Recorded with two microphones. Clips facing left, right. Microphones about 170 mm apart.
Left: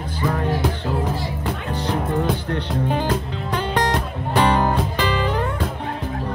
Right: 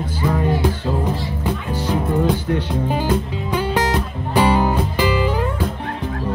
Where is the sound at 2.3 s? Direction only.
5° right (ahead or behind).